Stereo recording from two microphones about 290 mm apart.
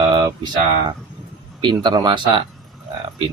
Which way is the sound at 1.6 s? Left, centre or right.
Centre.